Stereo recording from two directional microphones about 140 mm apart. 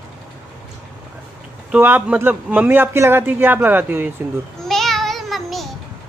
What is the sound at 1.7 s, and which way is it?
Speech, 15° right (ahead or behind).